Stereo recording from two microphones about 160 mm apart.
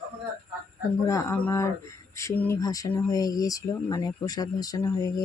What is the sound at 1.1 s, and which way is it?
Speech, 20° left (ahead or behind).